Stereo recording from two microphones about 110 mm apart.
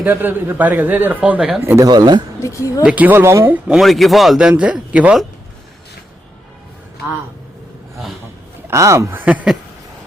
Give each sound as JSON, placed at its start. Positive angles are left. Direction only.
{"t": 0.0, "sound": "speech", "side_deg": -15}
{"t": 1.8, "sound": "speech", "side_deg": -40}
{"t": 2.4, "sound": "speech", "side_deg": 30}
{"t": 2.8, "sound": "speech", "side_deg": -15}
{"t": 3.7, "sound": "speech", "side_deg": 0}
{"t": 8.6, "sound": "speech", "side_deg": -30}
{"t": 9.2, "sound": "speech", "side_deg": -10}